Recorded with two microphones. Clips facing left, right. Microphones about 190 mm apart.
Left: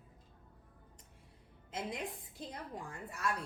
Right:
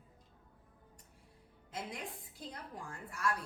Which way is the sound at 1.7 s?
20° left (ahead or behind).